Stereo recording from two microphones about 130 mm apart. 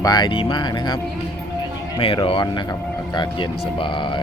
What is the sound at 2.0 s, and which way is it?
Speech, 45° left (ahead or behind).